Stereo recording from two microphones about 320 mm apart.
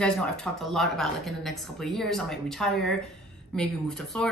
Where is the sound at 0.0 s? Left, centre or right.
Centre.